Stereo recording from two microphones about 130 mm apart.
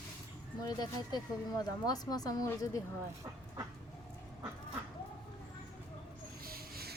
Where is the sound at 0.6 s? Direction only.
30° left (ahead or behind).